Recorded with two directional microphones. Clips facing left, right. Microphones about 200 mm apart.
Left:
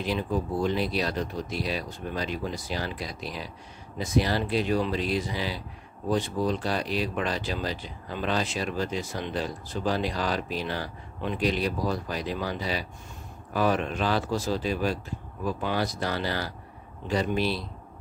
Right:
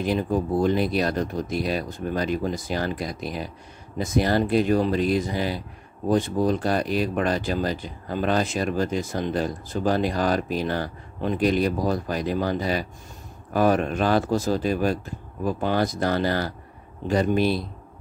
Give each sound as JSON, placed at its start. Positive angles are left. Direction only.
{"t": 0.0, "sound": "speech", "side_deg": -50}